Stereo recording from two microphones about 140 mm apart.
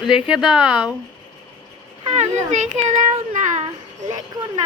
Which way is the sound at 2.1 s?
55° right (ahead or behind).